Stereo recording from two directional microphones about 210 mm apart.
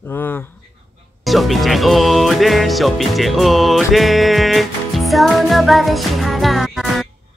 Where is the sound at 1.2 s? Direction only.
Centre (ahead or behind).